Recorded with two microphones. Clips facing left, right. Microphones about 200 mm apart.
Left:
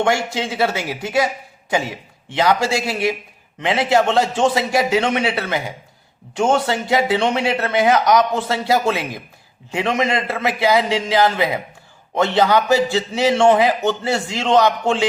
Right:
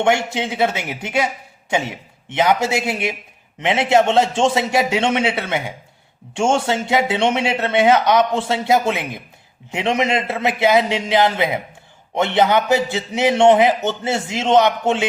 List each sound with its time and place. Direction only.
0.0 s a man's voice: 20° right (ahead or behind)